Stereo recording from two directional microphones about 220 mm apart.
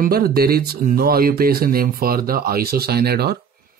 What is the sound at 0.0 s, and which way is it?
Speech, 45° right (ahead or behind).